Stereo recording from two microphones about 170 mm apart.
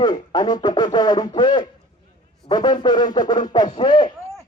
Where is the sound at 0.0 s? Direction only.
25° left (ahead or behind).